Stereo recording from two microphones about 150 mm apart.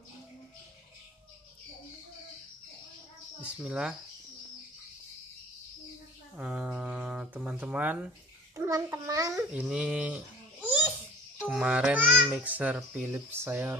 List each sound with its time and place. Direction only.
3.4 s cricket: 5° right (ahead or behind)
6.3 s speech: 10° right (ahead or behind)
8.5 s a child's voice: 20° right (ahead or behind)
9.3 s speech: 5° right (ahead or behind)
11.4 s speech: 5° right (ahead or behind)